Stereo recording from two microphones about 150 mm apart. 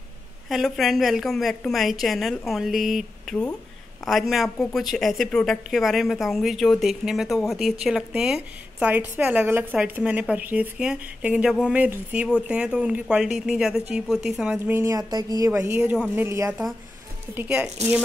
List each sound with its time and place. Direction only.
0.5 s a woman's voice: centre (ahead or behind)
14.7 s a woman's voice: 20° right (ahead or behind)